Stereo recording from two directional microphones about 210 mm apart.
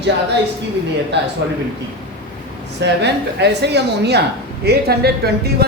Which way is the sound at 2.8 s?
55° right (ahead or behind).